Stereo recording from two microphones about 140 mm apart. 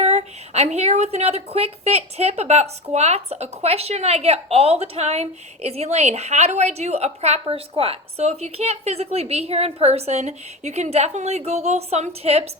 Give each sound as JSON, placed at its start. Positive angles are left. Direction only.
{"t": 0.0, "sound": "a woman's voice", "side_deg": -50}